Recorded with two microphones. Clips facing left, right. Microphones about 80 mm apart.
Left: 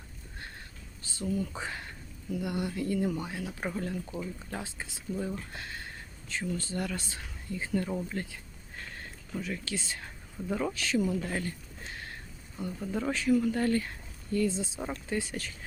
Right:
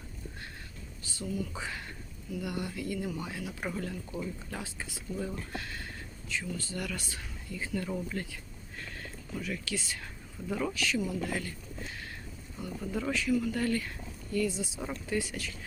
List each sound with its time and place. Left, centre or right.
1.0 s speech: left
2.7 s speech: left
9.4 s speech: left
12.6 s speech: left